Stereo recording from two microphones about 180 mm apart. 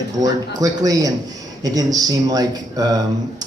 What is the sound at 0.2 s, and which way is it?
Speech, 20° right (ahead or behind).